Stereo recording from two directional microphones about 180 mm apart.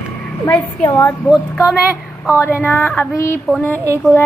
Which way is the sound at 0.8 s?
15° left (ahead or behind).